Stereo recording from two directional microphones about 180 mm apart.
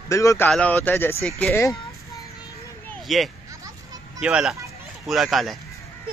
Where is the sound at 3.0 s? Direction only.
Centre (ahead or behind).